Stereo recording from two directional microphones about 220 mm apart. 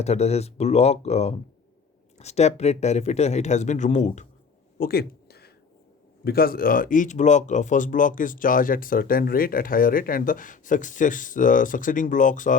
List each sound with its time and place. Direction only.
0.0 s speech: 30° left (ahead or behind)
4.8 s a sound: 45° left (ahead or behind)
6.2 s speech: 45° left (ahead or behind)